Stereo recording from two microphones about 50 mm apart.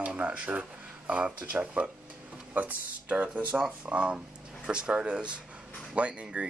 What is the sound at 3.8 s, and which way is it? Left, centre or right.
Speech, right.